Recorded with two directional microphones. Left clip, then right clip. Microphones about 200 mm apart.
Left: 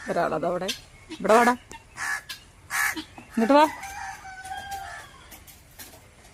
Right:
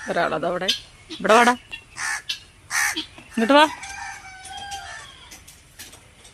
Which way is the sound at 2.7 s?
60° left (ahead or behind).